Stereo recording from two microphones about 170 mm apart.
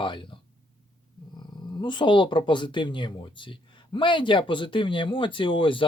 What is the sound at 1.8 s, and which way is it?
A man's voice, 25° left (ahead or behind).